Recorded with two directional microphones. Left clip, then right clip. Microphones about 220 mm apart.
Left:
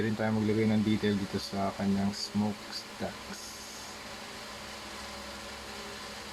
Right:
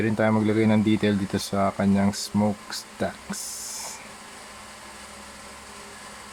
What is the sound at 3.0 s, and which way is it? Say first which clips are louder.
Speech: right 11 dB; 40° right (ahead or behind).